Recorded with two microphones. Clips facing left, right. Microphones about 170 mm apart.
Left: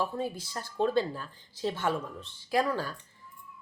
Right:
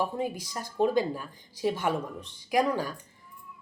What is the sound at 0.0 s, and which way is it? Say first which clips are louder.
A woman's voice: right 2 dB; 15° right (ahead or behind).